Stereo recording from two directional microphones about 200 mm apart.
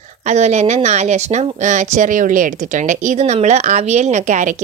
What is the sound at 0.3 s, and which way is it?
Speech, 35° right (ahead or behind).